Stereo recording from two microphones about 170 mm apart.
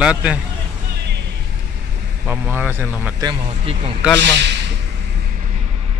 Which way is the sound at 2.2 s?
10° right (ahead or behind).